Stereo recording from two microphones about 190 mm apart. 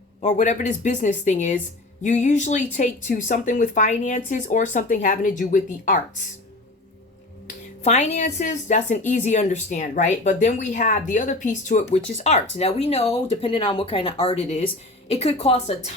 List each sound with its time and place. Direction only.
0.2 s speech: 40° left (ahead or behind)
7.4 s speech: 35° left (ahead or behind)